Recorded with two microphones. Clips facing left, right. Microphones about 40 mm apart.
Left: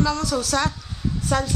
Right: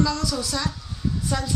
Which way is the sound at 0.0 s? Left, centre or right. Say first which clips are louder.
Left 2 dB; left.